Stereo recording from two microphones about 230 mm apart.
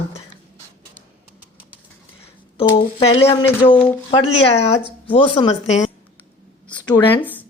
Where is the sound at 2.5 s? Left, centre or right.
Left.